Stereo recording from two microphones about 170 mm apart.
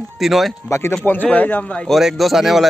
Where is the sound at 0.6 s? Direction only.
15° left (ahead or behind); by 2.7 s centre (ahead or behind).